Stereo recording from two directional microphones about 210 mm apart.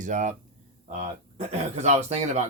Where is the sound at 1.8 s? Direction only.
35° right (ahead or behind).